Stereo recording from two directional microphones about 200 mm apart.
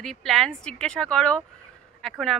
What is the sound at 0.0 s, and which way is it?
Speech, centre (ahead or behind).